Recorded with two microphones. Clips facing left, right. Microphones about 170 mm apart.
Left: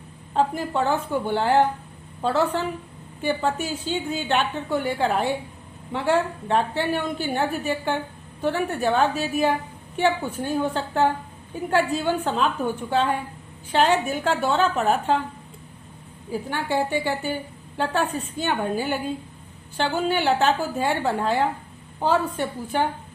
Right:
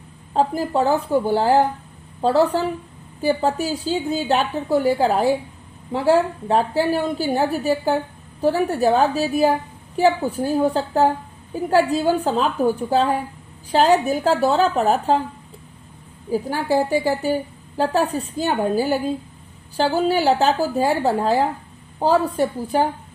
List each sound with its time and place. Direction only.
0.3 s a woman's voice: 35° right (ahead or behind)
16.3 s a woman's voice: 35° right (ahead or behind)